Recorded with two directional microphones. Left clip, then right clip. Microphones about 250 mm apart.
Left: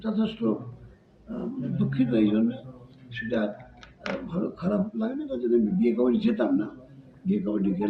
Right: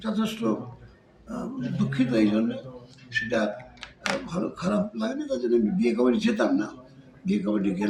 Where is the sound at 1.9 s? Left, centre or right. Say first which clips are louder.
Right 1 dB; centre.